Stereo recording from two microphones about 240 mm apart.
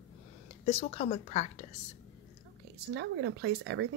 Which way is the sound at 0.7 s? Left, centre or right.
Left.